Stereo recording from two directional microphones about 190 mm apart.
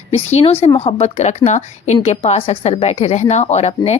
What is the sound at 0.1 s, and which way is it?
A woman's voice, 35° left (ahead or behind).